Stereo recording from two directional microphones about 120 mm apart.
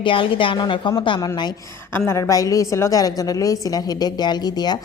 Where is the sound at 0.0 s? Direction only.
45° left (ahead or behind).